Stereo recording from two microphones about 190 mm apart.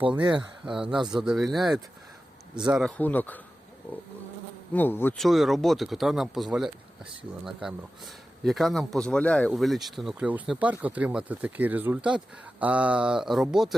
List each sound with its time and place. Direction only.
0.0 s speech: 25° right (ahead or behind)
0.6 s speech: 5° right (ahead or behind)
3.0 s insect: 10° left (ahead or behind)
5.2 s speech: centre (ahead or behind)